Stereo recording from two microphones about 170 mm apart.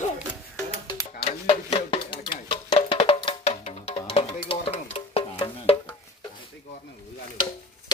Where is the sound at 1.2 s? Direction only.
35° left (ahead or behind).